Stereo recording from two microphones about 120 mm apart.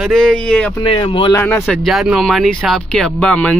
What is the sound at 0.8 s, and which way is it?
Speech, 40° left (ahead or behind).